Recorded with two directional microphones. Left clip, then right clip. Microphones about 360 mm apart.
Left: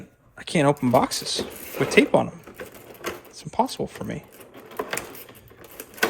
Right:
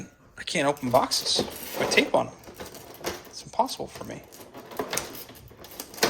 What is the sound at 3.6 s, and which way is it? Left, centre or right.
Speech, centre.